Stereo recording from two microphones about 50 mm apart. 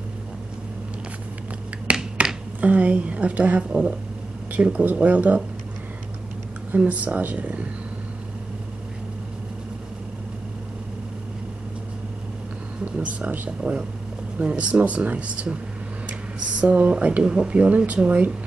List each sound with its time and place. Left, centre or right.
1.9 s finger snapping: right
2.6 s speech: right
6.8 s speech: right
12.9 s speech: right
16.6 s speech: right